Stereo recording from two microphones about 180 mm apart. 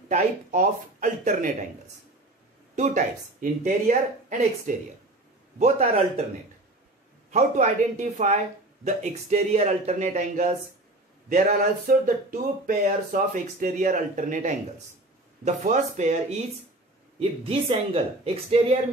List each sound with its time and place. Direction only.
0.1 s speech: 45° right (ahead or behind)
2.7 s a man's voice: 40° right (ahead or behind)
7.2 s a man's voice: 45° right (ahead or behind)
11.9 s a man's voice: 50° right (ahead or behind)